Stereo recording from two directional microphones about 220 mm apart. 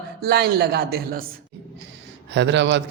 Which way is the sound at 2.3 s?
55° right (ahead or behind).